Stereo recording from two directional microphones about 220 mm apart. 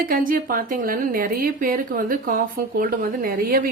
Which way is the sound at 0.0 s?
40° right (ahead or behind).